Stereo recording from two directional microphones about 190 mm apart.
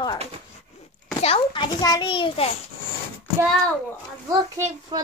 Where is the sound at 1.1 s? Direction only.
30° left (ahead or behind).